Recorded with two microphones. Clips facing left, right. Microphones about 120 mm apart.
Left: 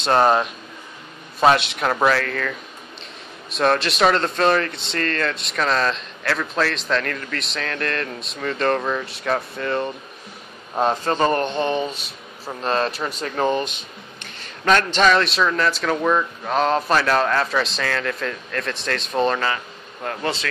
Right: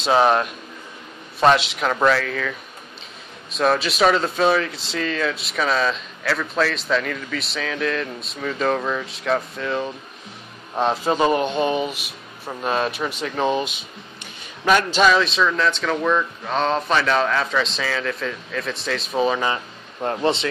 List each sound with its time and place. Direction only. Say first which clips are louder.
0.0 s speech: even; centre (ahead or behind)
3.5 s speech: even; centre (ahead or behind)
11.1 s speech: right 1 dB; 10° right (ahead or behind)
19.4 s speech: right 1 dB; 25° right (ahead or behind)